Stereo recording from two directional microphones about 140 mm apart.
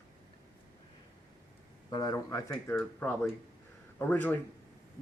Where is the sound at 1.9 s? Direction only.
30° left (ahead or behind).